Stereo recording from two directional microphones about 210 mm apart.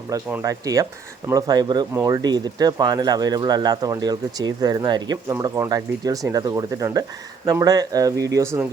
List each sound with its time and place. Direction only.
0.1 s speech: 10° right (ahead or behind)